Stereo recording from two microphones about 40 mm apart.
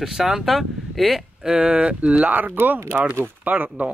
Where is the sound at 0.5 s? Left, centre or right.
Centre.